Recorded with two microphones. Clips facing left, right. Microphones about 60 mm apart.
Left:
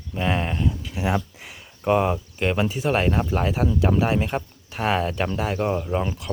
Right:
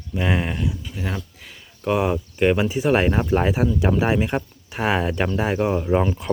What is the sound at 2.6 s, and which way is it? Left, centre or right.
Speech, right.